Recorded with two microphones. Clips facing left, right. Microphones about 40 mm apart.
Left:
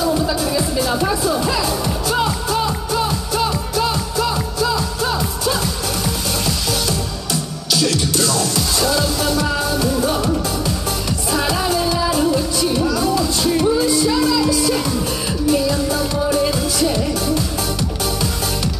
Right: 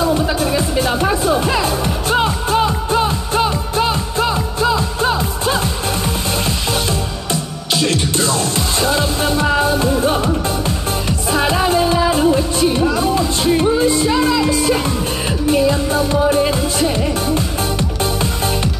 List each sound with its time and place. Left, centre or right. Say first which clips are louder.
0.0 s music: right 2 dB; right
7.7 s music: right 1 dB; right
11.3 s music: right 4 dB; right